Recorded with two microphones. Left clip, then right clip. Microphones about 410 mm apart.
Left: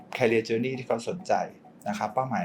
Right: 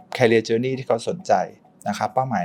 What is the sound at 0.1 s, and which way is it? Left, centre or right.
Speech, right.